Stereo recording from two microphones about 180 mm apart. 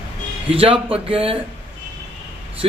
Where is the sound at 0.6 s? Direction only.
30° right (ahead or behind).